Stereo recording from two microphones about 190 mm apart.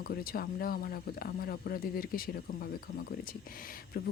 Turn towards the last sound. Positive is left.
turn(degrees=50)  # may be behind; listen again after turning